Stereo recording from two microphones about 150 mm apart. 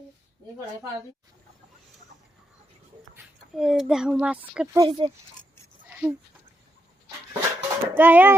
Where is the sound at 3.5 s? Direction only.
Centre (ahead or behind).